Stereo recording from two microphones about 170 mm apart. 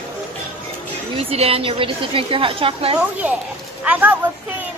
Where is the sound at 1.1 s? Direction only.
35° right (ahead or behind).